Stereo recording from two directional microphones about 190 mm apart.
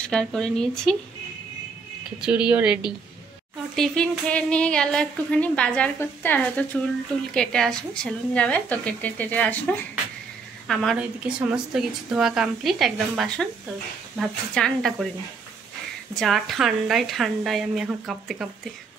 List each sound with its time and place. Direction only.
0.0 s a woman's voice: 5° left (ahead or behind)
2.2 s a woman's voice: 5° right (ahead or behind)
16.2 s a woman's voice: centre (ahead or behind)